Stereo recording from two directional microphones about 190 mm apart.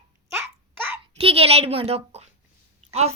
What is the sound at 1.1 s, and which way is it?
A child's voice, 30° right (ahead or behind).